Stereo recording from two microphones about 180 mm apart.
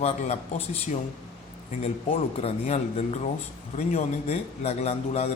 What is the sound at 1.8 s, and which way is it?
A man's voice, 35° left (ahead or behind).